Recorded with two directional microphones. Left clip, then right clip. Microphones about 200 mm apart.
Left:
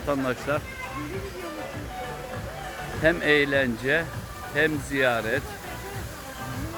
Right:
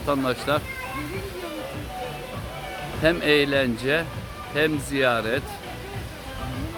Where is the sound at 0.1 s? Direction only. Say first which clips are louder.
Right 3 dB; 15° right (ahead or behind).